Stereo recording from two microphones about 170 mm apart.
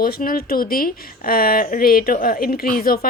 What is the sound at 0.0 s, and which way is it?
A woman's voice, 60° left (ahead or behind).